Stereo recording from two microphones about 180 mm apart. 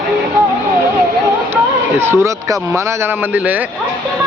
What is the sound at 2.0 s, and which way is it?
Speech, 15° right (ahead or behind).